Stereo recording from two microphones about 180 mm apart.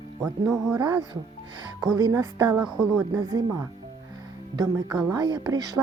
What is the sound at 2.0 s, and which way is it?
A woman's voice, 15° right (ahead or behind).